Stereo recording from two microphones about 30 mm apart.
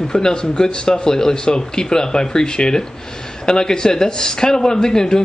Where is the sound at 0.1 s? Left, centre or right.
Left.